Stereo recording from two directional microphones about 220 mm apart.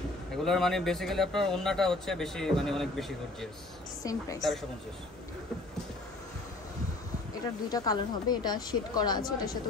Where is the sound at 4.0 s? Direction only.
15° left (ahead or behind).